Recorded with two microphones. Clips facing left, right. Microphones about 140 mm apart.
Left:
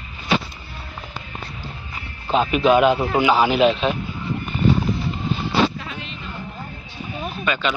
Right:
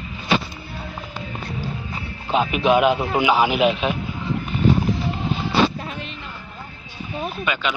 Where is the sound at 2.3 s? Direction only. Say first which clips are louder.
Left 2 dB; 5° right (ahead or behind).